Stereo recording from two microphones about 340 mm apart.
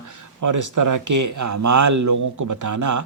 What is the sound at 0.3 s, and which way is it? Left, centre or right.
Speech, right.